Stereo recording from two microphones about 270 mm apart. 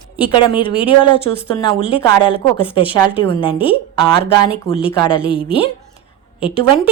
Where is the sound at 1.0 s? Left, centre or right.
Centre.